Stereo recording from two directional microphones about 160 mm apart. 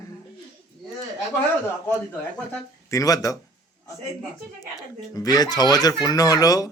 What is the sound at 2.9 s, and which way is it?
Speech, 20° left (ahead or behind).